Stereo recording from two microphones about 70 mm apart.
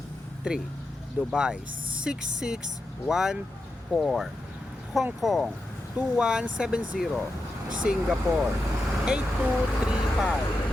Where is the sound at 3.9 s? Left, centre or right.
Centre.